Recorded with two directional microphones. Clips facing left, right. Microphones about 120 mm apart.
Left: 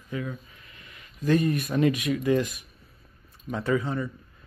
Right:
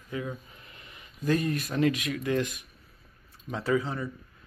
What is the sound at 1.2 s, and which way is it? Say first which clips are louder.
Speech: left 4 dB; centre (ahead or behind).